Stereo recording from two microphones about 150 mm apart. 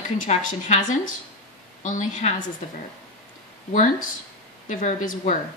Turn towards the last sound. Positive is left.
turn(degrees=60)  # may be behind; listen again after turning